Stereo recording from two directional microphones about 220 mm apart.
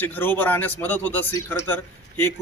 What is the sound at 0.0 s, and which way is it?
A man's voice, 10° left (ahead or behind).